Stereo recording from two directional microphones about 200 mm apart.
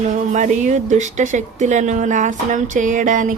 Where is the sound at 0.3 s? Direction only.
35° right (ahead or behind).